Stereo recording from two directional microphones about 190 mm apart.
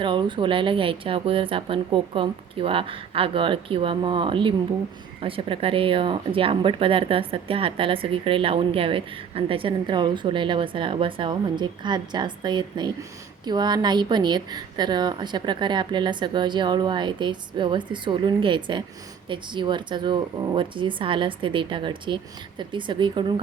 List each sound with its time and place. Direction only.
0.0 s speech: 25° right (ahead or behind)